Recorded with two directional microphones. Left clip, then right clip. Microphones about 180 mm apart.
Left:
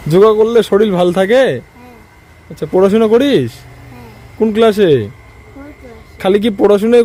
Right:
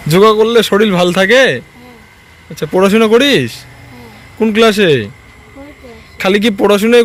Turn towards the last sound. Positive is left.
turn(degrees=15)  # may be behind; listen again after turning